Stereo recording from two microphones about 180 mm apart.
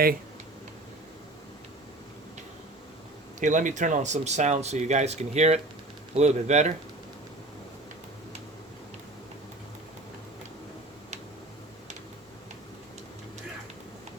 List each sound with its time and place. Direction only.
3.4 s speech: 45° right (ahead or behind)